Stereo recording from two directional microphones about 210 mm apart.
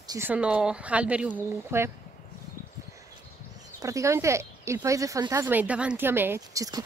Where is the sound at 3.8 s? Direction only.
15° right (ahead or behind).